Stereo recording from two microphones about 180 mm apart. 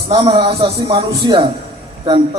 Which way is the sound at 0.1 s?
30° right (ahead or behind).